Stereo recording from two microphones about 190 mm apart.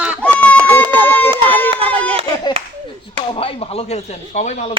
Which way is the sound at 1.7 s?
30° right (ahead or behind).